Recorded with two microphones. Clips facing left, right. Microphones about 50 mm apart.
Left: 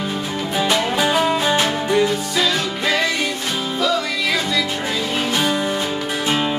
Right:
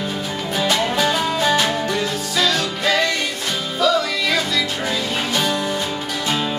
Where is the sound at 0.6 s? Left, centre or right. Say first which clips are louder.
Even; centre.